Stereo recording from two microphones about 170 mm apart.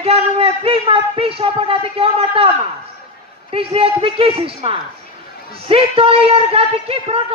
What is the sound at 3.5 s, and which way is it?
A man's voice, 35° right (ahead or behind).